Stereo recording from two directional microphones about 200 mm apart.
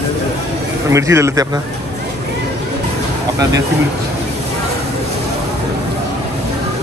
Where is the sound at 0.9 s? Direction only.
15° right (ahead or behind).